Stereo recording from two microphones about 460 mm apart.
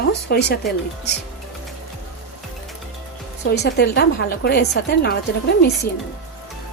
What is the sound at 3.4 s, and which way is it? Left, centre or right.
A woman's voice, left.